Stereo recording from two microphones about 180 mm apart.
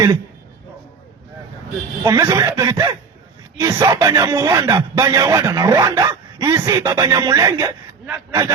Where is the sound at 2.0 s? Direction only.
15° right (ahead or behind).